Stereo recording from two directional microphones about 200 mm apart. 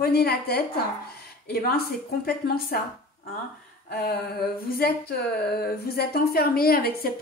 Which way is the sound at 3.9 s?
50° left (ahead or behind).